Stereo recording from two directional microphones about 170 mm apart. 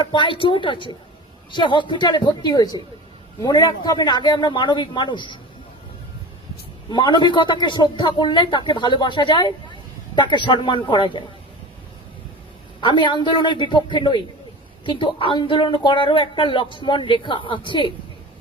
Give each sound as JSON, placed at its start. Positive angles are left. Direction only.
{"t": 0.0, "sound": "speech", "side_deg": 30}
{"t": 6.9, "sound": "speech", "side_deg": 25}
{"t": 12.8, "sound": "speech", "side_deg": 25}